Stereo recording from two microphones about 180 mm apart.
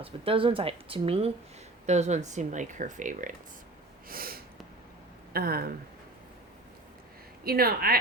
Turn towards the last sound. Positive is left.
turn(degrees=-55)  # may be behind; listen again after turning